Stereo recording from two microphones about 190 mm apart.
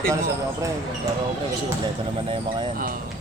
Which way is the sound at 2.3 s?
25° right (ahead or behind).